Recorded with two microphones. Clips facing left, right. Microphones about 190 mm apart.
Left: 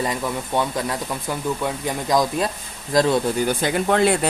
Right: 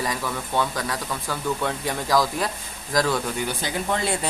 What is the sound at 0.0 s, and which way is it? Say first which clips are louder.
Speech: left 3 dB; 20° left (ahead or behind).